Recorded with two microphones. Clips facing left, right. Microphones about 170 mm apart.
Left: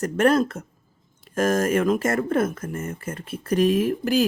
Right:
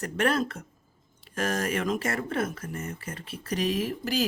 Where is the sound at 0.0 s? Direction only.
45° left (ahead or behind).